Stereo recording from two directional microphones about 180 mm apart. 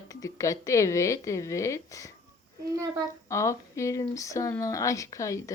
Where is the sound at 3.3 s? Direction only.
15° left (ahead or behind).